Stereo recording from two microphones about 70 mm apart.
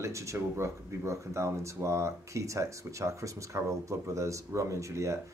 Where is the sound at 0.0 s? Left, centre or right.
Right.